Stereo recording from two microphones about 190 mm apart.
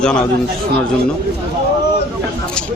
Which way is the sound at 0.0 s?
5° left (ahead or behind).